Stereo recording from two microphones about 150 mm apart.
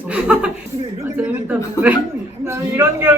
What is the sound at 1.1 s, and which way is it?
A man's voice, 10° right (ahead or behind).